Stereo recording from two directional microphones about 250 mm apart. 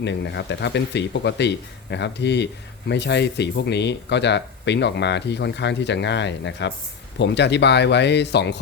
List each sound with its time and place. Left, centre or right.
0.0 s speech: left